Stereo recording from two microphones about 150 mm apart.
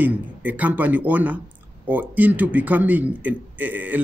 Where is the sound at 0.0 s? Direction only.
10° right (ahead or behind).